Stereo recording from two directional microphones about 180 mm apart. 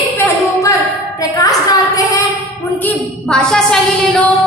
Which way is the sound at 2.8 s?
5° left (ahead or behind).